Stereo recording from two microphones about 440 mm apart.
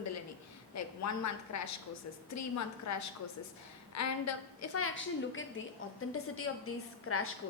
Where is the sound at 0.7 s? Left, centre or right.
Left.